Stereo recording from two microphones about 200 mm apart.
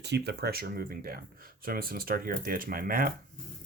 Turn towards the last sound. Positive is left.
turn(degrees=-45)  # may be behind; listen again after turning